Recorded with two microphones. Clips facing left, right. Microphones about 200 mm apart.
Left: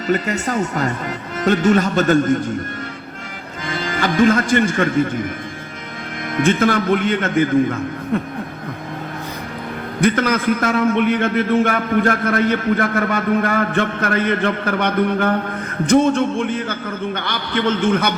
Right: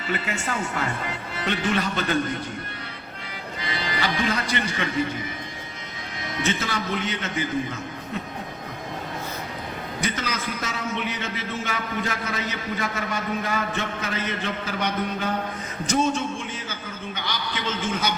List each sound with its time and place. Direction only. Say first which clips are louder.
0.1 s speech: left 9 dB; 40° left (ahead or behind)
3.6 s a man's voice: left 7 dB; 50° left (ahead or behind)
6.3 s a man's voice: left 11 dB; 55° left (ahead or behind)
10.0 s a man's voice: left 13 dB; 55° left (ahead or behind)